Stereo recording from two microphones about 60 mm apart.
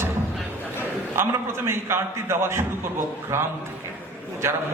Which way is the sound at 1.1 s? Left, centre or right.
Right.